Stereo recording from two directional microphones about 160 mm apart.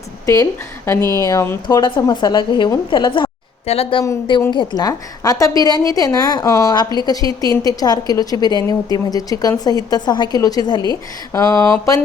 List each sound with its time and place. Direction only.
1.2 s a woman's voice: 20° left (ahead or behind); by 4.0 s 35° left (ahead or behind)
4.0 s a woman's voice: 20° left (ahead or behind)